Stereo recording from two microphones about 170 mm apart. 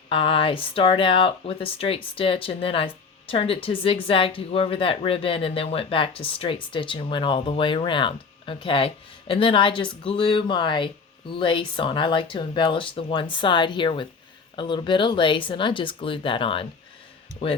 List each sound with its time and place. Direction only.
0.1 s speech: 30° left (ahead or behind)